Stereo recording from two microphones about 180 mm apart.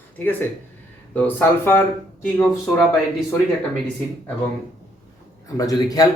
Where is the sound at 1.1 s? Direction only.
10° left (ahead or behind).